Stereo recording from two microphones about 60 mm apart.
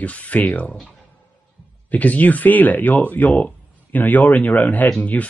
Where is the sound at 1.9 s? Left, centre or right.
Left.